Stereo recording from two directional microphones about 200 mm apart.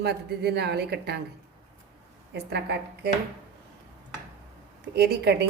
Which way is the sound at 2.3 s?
55° right (ahead or behind).